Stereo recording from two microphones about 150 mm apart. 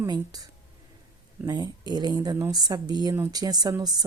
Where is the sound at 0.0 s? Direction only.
25° right (ahead or behind).